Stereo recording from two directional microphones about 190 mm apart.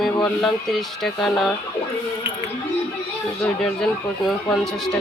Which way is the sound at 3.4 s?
5° left (ahead or behind).